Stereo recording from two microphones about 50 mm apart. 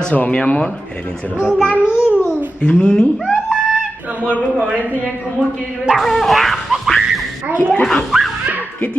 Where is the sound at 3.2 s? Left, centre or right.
Centre.